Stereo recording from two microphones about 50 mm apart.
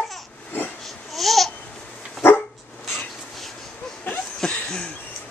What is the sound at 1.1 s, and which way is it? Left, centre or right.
Babbling, centre.